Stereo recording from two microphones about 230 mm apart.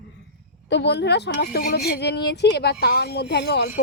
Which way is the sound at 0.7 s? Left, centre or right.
Left.